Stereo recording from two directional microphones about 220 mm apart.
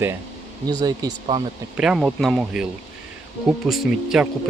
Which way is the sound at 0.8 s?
20° right (ahead or behind).